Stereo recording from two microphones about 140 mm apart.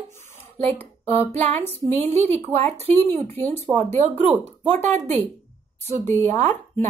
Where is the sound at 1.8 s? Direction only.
50° right (ahead or behind).